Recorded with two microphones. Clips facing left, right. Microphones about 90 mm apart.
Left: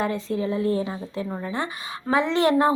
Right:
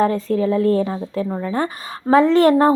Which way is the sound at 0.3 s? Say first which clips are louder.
Right 7 dB; 55° right (ahead or behind).